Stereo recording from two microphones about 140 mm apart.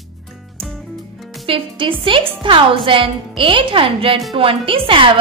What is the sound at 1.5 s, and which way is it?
A woman's voice, 40° right (ahead or behind).